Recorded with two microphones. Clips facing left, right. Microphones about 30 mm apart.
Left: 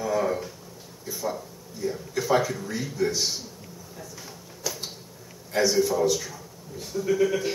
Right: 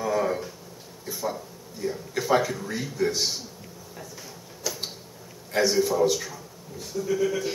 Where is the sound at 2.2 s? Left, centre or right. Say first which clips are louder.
Even; centre.